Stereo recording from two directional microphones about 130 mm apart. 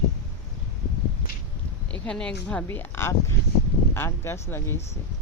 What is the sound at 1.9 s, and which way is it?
Speech, 10° left (ahead or behind).